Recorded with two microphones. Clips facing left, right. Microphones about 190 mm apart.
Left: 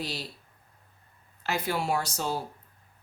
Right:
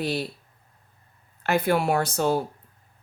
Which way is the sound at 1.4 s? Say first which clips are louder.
Right 7 dB; 55° right (ahead or behind).